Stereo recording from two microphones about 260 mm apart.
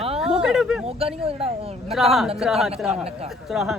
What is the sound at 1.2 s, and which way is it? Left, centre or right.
Speech, right.